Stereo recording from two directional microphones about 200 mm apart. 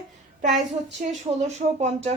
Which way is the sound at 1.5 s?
35° right (ahead or behind).